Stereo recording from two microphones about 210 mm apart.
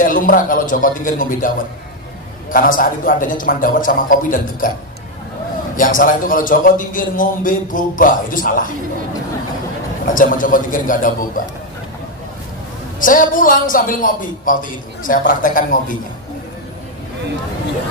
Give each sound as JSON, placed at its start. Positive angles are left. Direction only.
{"t": 0.0, "sound": "a man's voice", "side_deg": 40}
{"t": 2.5, "sound": "a man's voice", "side_deg": 40}
{"t": 5.8, "sound": "a man's voice", "side_deg": 40}
{"t": 10.0, "sound": "a man's voice", "side_deg": 40}
{"t": 13.0, "sound": "a man's voice", "side_deg": 40}